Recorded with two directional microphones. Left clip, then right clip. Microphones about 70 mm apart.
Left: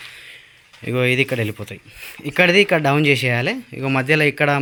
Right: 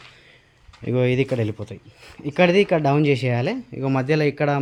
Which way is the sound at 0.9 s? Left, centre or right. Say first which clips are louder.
Left 3 dB; right.